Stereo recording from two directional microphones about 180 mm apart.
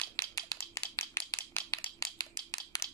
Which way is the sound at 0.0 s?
15° left (ahead or behind).